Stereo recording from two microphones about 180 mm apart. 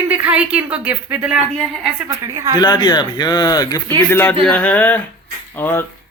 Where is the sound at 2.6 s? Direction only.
20° left (ahead or behind).